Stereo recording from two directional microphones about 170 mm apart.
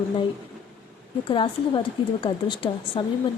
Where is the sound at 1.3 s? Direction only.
30° left (ahead or behind).